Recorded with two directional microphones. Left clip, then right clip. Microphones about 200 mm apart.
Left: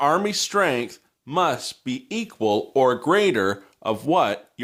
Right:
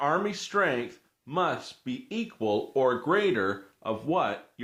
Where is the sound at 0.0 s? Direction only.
50° left (ahead or behind).